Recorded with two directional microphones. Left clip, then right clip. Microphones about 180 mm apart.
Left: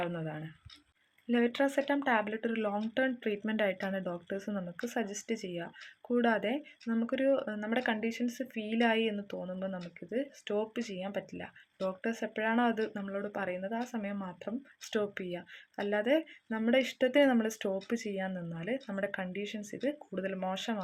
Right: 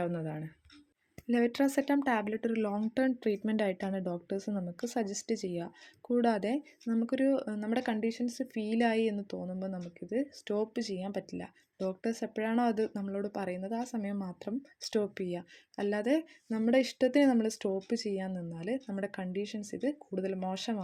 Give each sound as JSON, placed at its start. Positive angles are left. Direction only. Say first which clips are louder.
{"t": 0.0, "sound": "speech", "louder": "right 1 dB", "side_deg": -35}